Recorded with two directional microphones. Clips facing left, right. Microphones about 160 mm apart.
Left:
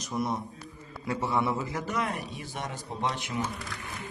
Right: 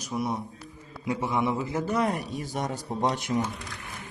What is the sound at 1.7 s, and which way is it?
Speech, 35° right (ahead or behind).